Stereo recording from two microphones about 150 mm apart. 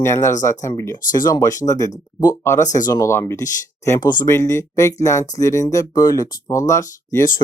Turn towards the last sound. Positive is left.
turn(degrees=20)  # may be behind; listen again after turning